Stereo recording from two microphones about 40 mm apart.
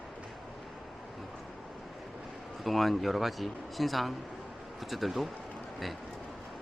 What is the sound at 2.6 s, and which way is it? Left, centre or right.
Speech, centre.